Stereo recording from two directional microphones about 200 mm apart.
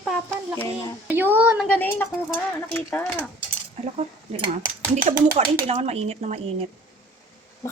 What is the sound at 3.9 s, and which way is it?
Speech, 35° right (ahead or behind).